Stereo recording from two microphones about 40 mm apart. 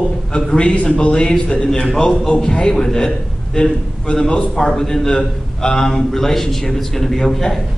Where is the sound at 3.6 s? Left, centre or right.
Left.